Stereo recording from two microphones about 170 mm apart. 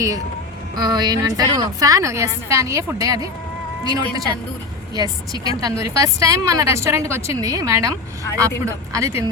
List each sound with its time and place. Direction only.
0.8 s a woman's voice: 25° right (ahead or behind)